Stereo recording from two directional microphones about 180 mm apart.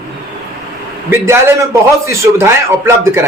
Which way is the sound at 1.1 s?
15° right (ahead or behind).